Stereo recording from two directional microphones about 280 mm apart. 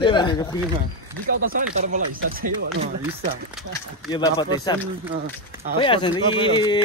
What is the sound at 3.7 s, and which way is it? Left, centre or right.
Speech, centre.